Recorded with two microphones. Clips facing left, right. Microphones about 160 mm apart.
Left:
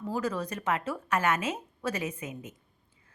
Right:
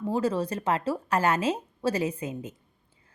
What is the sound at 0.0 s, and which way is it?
Speech, 30° right (ahead or behind).